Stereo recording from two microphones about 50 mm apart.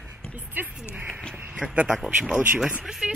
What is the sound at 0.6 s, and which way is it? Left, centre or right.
Speech, right.